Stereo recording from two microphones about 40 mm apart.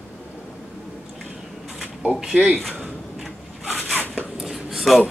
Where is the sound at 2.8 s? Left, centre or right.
Centre.